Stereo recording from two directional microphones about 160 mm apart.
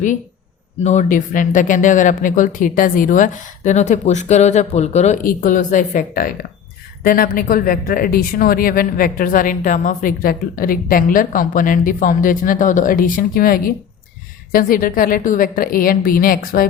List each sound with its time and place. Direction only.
0.8 s speech: 45° left (ahead or behind)
5.2 s speech: 55° left (ahead or behind)